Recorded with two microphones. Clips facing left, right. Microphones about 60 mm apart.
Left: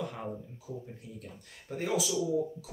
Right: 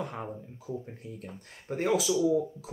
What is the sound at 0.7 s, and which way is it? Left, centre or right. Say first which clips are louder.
Speech: right 5 dB; right.